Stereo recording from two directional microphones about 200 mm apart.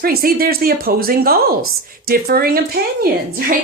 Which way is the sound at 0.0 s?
45° right (ahead or behind).